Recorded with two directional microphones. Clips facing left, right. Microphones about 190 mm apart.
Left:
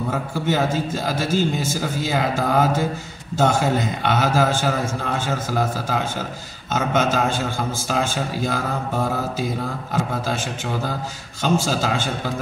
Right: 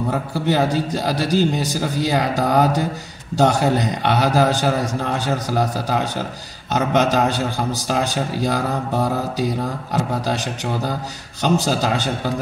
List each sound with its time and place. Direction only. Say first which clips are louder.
0.5 s a man's voice: right 3 dB; 35° right (ahead or behind)
11.4 s a man's voice: right 2 dB; 40° right (ahead or behind)